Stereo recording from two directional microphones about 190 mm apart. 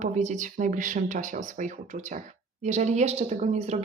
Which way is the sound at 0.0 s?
40° right (ahead or behind).